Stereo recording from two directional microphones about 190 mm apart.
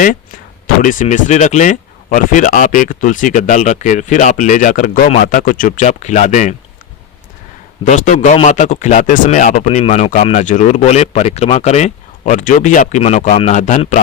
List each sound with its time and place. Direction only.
0.8 s speech: 45° left (ahead or behind)
7.9 s speech: 40° left (ahead or behind)